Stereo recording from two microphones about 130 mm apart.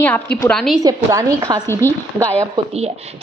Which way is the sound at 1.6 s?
20° left (ahead or behind).